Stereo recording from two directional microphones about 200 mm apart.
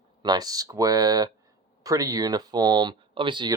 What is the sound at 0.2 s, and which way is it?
Speech, 20° right (ahead or behind).